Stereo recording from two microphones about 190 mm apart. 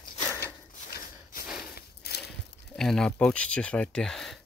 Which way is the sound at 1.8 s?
60° left (ahead or behind).